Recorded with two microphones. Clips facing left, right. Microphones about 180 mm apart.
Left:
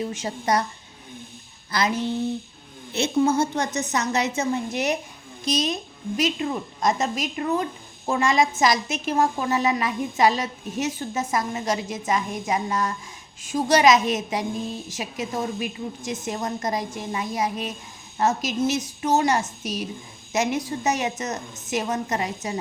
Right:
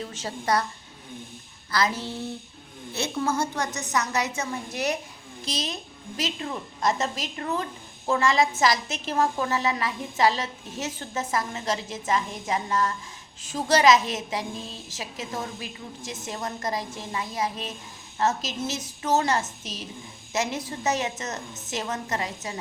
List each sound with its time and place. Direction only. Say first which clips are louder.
0.0 s a woman's voice: left 4 dB; 15° left (ahead or behind)
1.7 s a woman's voice: left 3 dB; 20° left (ahead or behind)